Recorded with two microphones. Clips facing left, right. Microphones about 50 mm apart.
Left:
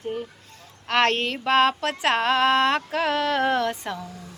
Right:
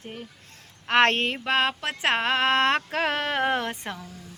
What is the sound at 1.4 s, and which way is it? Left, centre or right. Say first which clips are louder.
Speech: left 5 dB; centre.